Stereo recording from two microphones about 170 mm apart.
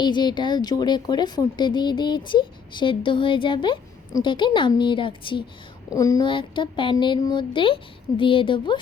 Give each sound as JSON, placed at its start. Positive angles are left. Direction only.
{"t": 0.0, "sound": "a woman's voice", "side_deg": 25}